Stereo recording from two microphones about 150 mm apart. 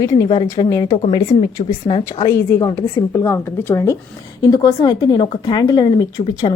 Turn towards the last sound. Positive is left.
turn(degrees=30)  # may be behind; listen again after turning